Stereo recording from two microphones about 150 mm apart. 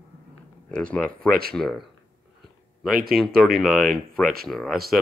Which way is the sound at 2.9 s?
80° right.